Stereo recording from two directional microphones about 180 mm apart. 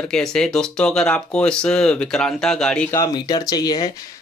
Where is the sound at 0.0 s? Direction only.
5° left (ahead or behind).